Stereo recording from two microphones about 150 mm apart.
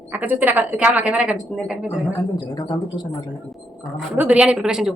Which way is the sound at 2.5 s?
30° left (ahead or behind).